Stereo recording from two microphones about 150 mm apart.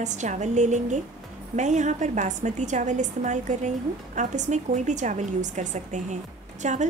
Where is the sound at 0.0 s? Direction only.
50° right (ahead or behind).